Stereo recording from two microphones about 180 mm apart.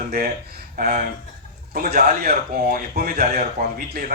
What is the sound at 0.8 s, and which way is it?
A man's voice, 55° right (ahead or behind).